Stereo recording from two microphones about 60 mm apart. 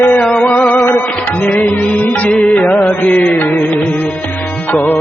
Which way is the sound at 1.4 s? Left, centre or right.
Left.